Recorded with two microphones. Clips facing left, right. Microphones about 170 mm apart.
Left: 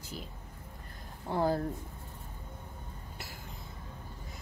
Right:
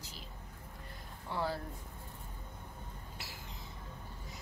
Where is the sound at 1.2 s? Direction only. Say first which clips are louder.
Left 7 dB; 45° left (ahead or behind).